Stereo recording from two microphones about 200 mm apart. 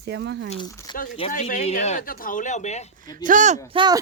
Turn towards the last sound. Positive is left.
turn(degrees=-25)  # may be behind; listen again after turning